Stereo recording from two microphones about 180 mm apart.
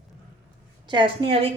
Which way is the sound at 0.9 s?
25° right (ahead or behind).